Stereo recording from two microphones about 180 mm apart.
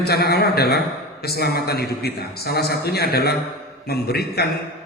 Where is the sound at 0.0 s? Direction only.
60° left (ahead or behind).